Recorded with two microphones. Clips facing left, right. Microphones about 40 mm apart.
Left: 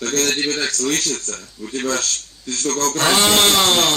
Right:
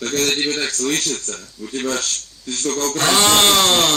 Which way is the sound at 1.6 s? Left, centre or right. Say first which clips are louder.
Left 1 dB; left.